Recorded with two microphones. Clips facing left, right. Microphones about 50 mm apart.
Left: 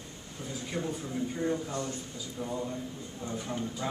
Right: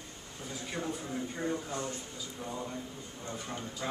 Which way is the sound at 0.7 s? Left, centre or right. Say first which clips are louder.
Left 3 dB; right.